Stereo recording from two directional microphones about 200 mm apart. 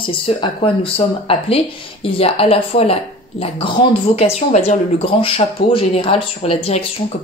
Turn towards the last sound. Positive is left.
turn(degrees=30)  # may be behind; listen again after turning